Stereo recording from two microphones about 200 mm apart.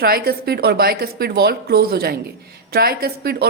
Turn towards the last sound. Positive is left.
turn(degrees=-50)  # may be behind; listen again after turning